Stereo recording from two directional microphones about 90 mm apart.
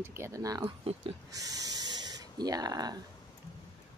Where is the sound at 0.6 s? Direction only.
80° right.